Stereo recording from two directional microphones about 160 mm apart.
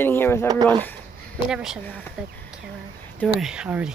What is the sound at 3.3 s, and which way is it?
Speech, 5° right (ahead or behind).